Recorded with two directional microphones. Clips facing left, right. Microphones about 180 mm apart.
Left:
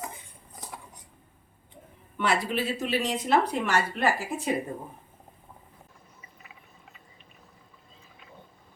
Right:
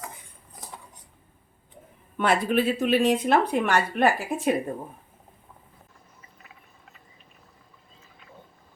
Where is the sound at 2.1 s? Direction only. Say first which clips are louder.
Right 5 dB; 50° right (ahead or behind).